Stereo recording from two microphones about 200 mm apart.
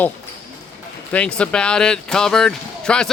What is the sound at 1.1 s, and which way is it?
Speech, 5° left (ahead or behind).